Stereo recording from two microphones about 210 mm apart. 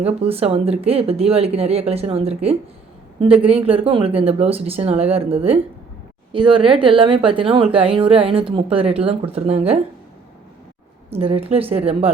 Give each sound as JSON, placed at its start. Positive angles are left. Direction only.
{"t": 0.0, "sound": "a woman's voice", "side_deg": -30}
{"t": 11.1, "sound": "a woman's voice", "side_deg": -25}